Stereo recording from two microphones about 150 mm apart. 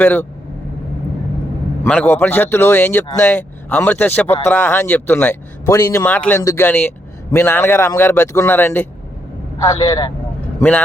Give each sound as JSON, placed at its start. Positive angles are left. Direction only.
{"t": 0.0, "sound": "speech", "side_deg": 10}
{"t": 1.8, "sound": "speech", "side_deg": 10}
{"t": 6.1, "sound": "speech", "side_deg": 10}
{"t": 6.4, "sound": "speech", "side_deg": 25}
{"t": 6.7, "sound": "speech", "side_deg": 15}
{"t": 9.7, "sound": "speech", "side_deg": 35}
{"t": 10.6, "sound": "speech", "side_deg": 10}